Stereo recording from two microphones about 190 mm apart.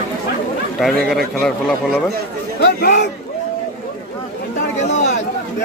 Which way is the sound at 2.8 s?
55° left (ahead or behind).